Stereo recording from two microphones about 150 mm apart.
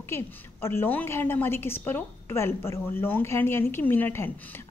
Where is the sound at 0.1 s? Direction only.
15° left (ahead or behind).